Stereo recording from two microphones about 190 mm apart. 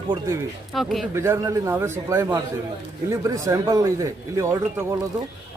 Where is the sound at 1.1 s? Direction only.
15° right (ahead or behind).